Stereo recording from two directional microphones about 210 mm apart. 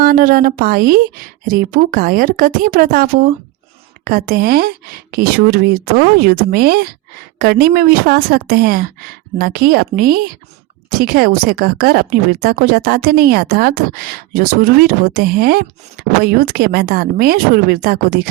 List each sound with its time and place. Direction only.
0.0 s a woman's voice: 45° right (ahead or behind)